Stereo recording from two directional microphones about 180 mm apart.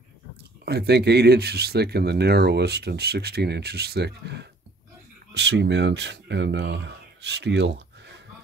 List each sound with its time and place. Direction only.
0.7 s speech: 65° right (ahead or behind)